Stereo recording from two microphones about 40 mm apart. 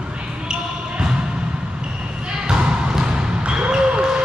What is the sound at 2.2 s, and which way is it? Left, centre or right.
Basketball bounce, right.